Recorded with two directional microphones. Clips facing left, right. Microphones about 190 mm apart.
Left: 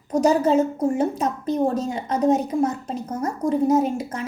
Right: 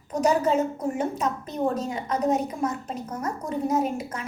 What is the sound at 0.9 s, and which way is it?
A woman's voice, 35° left (ahead or behind).